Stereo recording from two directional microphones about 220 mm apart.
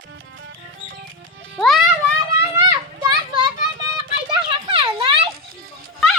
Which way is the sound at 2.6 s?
20° right (ahead or behind).